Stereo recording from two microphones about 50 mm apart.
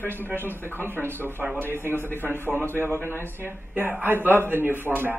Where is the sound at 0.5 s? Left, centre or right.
Left.